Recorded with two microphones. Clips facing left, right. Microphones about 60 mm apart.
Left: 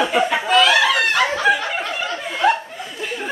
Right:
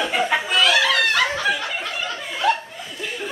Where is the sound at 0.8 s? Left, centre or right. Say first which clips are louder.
Left 2 dB; centre.